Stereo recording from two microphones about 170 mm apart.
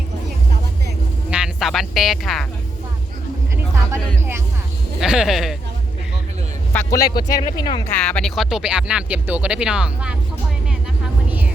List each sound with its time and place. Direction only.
1.3 s speech: 5° right (ahead or behind)
4.9 s speech: 5° right (ahead or behind)
6.9 s speech: 20° left (ahead or behind)
7.9 s speech: 5° left (ahead or behind)